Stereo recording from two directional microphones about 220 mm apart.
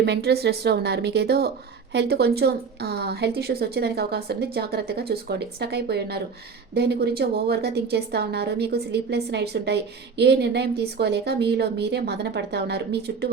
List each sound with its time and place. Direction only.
0.0 s a woman's voice: 50° right (ahead or behind)